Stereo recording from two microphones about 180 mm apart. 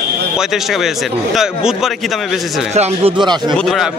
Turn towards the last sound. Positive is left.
turn(degrees=0)  # may be behind; listen again after turning